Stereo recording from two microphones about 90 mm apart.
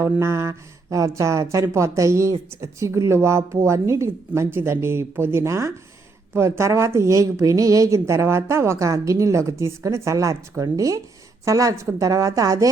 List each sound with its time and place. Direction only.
0.0 s a woman's voice: 30° right (ahead or behind)